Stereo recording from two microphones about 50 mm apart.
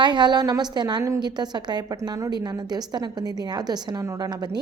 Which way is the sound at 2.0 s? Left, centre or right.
Right.